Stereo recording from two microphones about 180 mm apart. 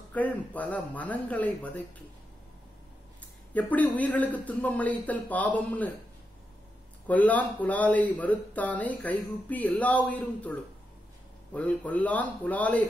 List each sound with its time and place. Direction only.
0.1 s speech: 10° left (ahead or behind)
3.5 s speech: 10° left (ahead or behind)
7.1 s speech: 10° left (ahead or behind)